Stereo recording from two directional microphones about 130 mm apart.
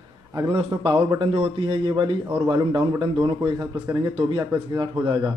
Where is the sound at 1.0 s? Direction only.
35° right (ahead or behind).